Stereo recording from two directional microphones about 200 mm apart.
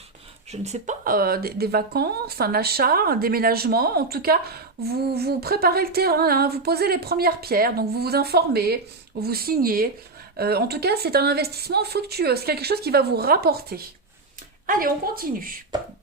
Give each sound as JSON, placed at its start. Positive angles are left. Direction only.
{"t": 0.5, "sound": "speech", "side_deg": -35}